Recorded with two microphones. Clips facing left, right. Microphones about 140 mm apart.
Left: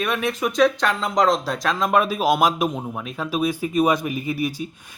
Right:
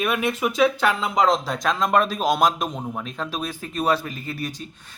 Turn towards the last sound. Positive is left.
turn(degrees=10)  # may be behind; listen again after turning